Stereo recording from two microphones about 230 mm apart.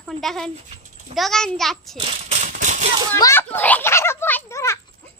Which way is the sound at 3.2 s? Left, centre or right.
Centre.